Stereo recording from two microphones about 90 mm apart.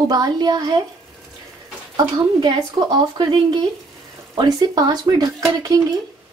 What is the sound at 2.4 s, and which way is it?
Speech, 55° right (ahead or behind).